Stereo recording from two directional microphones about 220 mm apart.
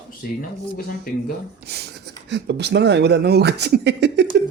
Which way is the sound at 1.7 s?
50° right (ahead or behind).